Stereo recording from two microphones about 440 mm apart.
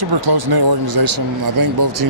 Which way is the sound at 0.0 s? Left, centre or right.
Right.